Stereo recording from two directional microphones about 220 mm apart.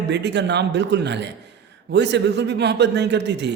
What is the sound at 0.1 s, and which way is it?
A man's voice, 50° right (ahead or behind).